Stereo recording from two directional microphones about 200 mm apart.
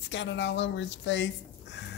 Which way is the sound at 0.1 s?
65° left (ahead or behind).